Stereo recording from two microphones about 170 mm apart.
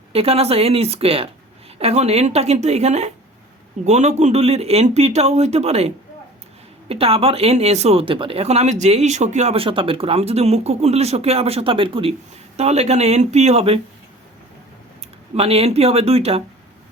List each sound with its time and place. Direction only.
0.1 s speech: 35° right (ahead or behind)
15.4 s speech: 35° right (ahead or behind)